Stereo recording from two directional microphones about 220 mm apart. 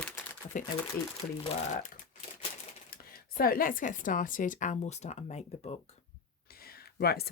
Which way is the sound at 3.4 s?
40° left (ahead or behind).